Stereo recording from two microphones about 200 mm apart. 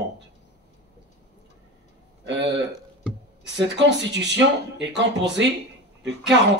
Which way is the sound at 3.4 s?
60° right (ahead or behind).